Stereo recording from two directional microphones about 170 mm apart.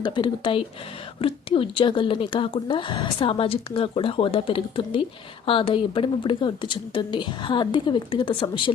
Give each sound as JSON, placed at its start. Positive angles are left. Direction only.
{"t": 0.0, "sound": "a woman's voice", "side_deg": 30}